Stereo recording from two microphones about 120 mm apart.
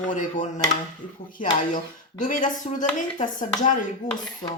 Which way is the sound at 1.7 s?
90° left.